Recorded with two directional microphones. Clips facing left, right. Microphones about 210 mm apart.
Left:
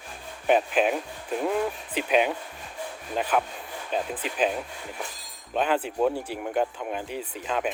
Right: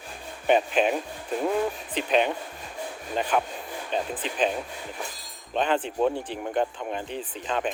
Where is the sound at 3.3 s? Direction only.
Centre (ahead or behind).